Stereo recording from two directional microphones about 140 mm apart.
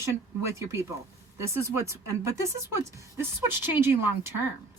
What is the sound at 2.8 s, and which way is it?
Speech, 20° right (ahead or behind).